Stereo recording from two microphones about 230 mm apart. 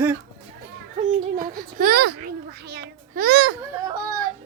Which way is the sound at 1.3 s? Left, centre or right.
Right.